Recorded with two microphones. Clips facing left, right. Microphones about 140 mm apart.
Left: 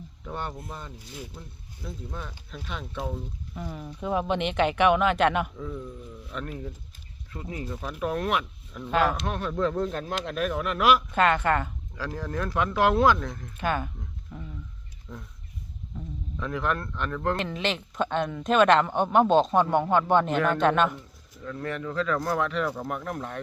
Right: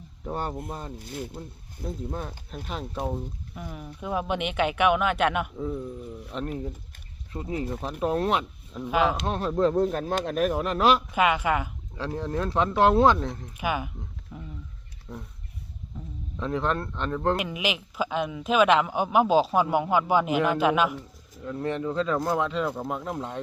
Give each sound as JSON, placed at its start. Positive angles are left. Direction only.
{"t": 0.3, "sound": "speech", "side_deg": -40}
{"t": 0.9, "sound": "speech", "side_deg": -55}
{"t": 2.0, "sound": "speech", "side_deg": -40}
{"t": 3.5, "sound": "speech", "side_deg": -5}
{"t": 5.5, "sound": "speech", "side_deg": -30}
{"t": 8.8, "sound": "speech", "side_deg": -5}
{"t": 9.2, "sound": "speech", "side_deg": -30}
{"t": 11.1, "sound": "a man's voice", "side_deg": -10}
{"t": 11.9, "sound": "speech", "side_deg": -25}
{"t": 13.6, "sound": "a man's voice", "side_deg": -10}
{"t": 15.1, "sound": "speech", "side_deg": -35}
{"t": 16.4, "sound": "speech", "side_deg": -30}
{"t": 17.3, "sound": "a man's voice", "side_deg": -10}
{"t": 21.4, "sound": "speech", "side_deg": -25}